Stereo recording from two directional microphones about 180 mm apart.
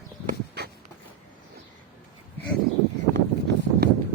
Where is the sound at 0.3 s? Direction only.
60° right (ahead or behind).